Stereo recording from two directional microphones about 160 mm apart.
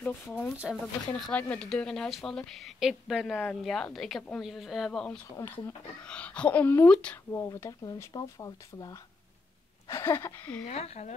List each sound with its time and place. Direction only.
0.0 s speech: 10° left (ahead or behind)
0.6 s speech: 5° right (ahead or behind)
5.3 s speech: 15° left (ahead or behind)
7.4 s speech: 20° left (ahead or behind)
10.6 s speech: 40° left (ahead or behind)